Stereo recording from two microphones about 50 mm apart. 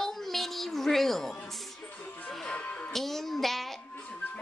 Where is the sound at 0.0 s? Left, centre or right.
Centre.